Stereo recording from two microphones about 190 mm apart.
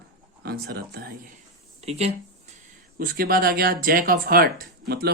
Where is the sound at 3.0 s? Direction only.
50° right (ahead or behind).